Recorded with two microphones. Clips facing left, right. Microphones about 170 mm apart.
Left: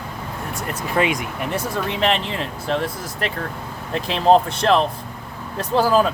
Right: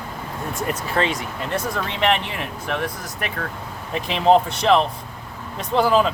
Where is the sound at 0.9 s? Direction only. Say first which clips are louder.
Left 5 dB; 15° left (ahead or behind).